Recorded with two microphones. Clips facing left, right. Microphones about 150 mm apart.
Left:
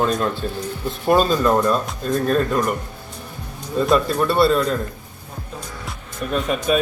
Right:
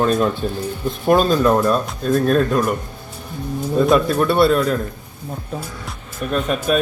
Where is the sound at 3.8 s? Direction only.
Centre (ahead or behind).